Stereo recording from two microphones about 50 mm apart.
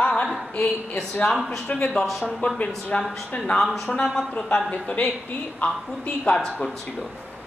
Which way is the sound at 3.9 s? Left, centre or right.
Centre.